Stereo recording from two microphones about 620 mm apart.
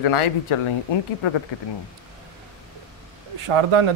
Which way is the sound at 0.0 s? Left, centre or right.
Left.